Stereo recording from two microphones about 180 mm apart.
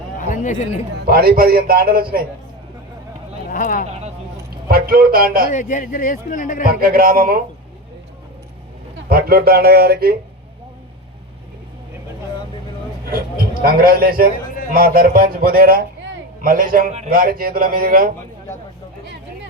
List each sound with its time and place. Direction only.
0.2 s chatter: 45° left (ahead or behind)
1.0 s a man's voice: 55° right (ahead or behind)
3.5 s speech: 50° left (ahead or behind)
4.7 s a man's voice: 55° right (ahead or behind)
5.5 s a man's voice: 45° left (ahead or behind)
6.7 s a man's voice: 55° right (ahead or behind)
9.0 s a man's voice: 60° right (ahead or behind)
13.1 s a man's voice: 55° right (ahead or behind)